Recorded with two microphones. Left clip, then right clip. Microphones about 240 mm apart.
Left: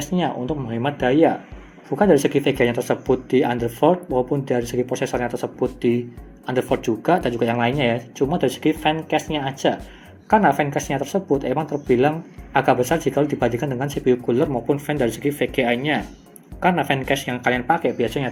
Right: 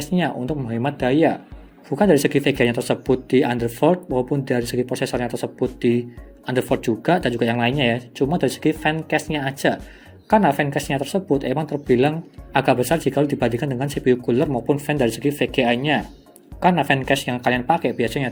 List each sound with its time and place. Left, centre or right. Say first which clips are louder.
0.0 s speech: even; right